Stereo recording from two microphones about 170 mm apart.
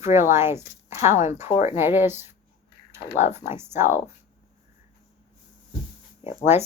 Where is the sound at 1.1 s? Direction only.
45° left (ahead or behind).